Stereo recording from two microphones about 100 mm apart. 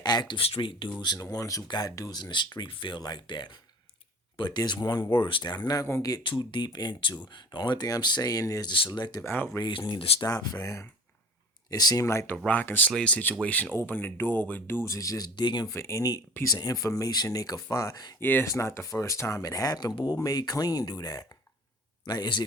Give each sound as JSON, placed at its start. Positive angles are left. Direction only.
{"t": 0.0, "sound": "speech", "side_deg": 45}
{"t": 0.3, "sound": "speech", "side_deg": 70}
{"t": 3.0, "sound": "speech", "side_deg": 50}
{"t": 5.1, "sound": "speech", "side_deg": 55}
{"t": 6.2, "sound": "speech", "side_deg": 55}
{"t": 8.7, "sound": "speech", "side_deg": 50}
{"t": 9.2, "sound": "speech", "side_deg": 25}
{"t": 9.6, "sound": "speech", "side_deg": 55}
{"t": 12.0, "sound": "speech", "side_deg": 30}
{"t": 15.4, "sound": "speech", "side_deg": 50}
{"t": 15.7, "sound": "speech", "side_deg": 30}
{"t": 18.2, "sound": "speech", "side_deg": 20}